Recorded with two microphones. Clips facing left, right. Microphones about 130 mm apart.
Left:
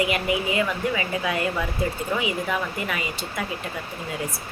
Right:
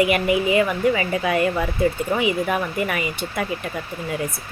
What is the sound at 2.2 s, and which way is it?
Speech, 55° right (ahead or behind).